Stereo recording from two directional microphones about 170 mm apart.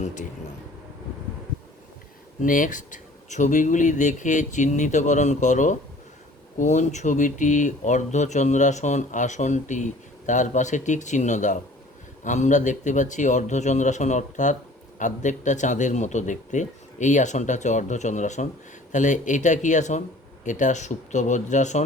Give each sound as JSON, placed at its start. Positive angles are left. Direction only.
{"t": 0.0, "sound": "speech", "side_deg": 45}
{"t": 2.4, "sound": "speech", "side_deg": 50}